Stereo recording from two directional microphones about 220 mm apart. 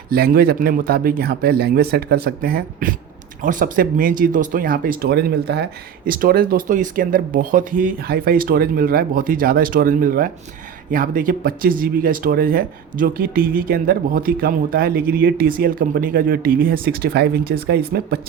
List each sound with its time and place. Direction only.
0.1 s speech: 45° right (ahead or behind)